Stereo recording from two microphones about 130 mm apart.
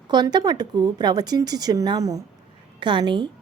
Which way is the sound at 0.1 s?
35° right (ahead or behind).